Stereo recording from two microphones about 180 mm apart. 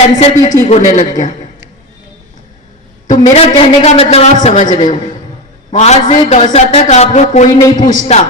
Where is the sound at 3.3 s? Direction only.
35° left (ahead or behind).